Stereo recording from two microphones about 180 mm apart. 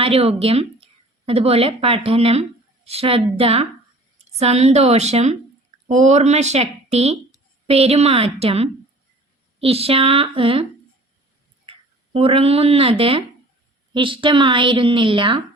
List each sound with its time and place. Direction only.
0.0 s a woman's voice: 35° right (ahead or behind)
12.1 s a woman's voice: 30° right (ahead or behind)